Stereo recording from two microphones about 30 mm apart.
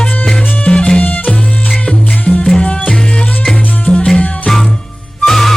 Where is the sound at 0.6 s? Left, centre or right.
Left.